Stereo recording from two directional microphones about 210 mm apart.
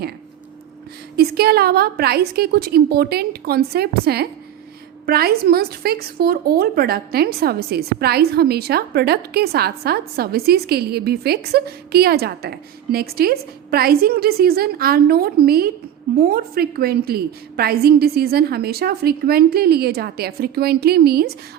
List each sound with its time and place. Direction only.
1.1 s a woman's voice: 50° right (ahead or behind)